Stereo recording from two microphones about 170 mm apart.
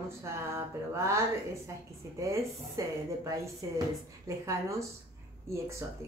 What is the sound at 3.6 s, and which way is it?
Speech, 20° right (ahead or behind).